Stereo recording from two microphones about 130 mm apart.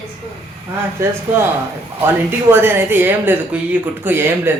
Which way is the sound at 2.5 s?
15° right (ahead or behind).